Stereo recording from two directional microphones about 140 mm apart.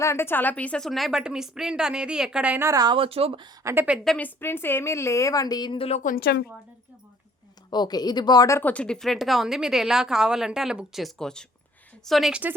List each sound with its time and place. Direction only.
0.0 s speech: 20° left (ahead or behind); by 2.9 s 25° right (ahead or behind)
2.9 s speech: 40° right (ahead or behind)
3.6 s a woman's voice: 20° right (ahead or behind)
3.8 s speech: centre (ahead or behind)
4.4 s a woman's voice: 15° left (ahead or behind); by 6.0 s 40° left (ahead or behind)
6.0 s speech: 80° left
7.7 s speech: 30° left (ahead or behind); by 12.5 s 10° right (ahead or behind)